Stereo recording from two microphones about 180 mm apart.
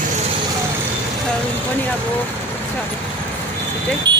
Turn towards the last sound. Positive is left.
turn(degrees=-25)  # may be behind; listen again after turning